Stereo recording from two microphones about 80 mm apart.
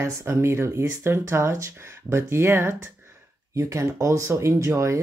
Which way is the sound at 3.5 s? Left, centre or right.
Right.